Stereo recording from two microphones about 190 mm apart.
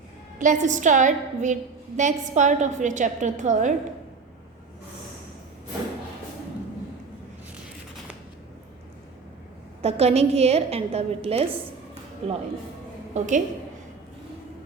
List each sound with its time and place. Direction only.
0.3 s a woman's voice: 40° right (ahead or behind)
9.8 s a woman's voice: 35° right (ahead or behind)